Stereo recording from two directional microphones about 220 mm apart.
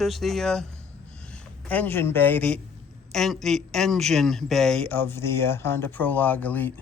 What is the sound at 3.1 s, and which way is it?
A man's voice, centre (ahead or behind).